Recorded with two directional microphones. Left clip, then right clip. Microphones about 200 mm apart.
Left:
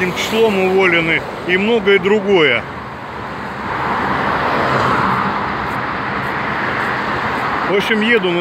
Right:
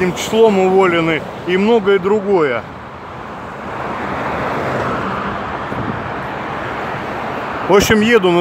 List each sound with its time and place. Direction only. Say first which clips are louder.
0.0 s speech: right 2 dB; 20° right (ahead or behind)
7.7 s speech: right 7 dB; 35° right (ahead or behind)
8.0 s speech: right 2 dB; 20° right (ahead or behind)